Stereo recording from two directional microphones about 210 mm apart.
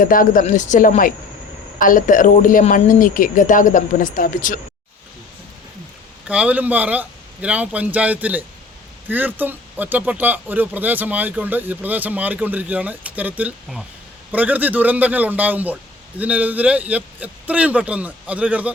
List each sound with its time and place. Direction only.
0.0 s a woman's voice: 40° left (ahead or behind)
6.2 s speech: 5° right (ahead or behind)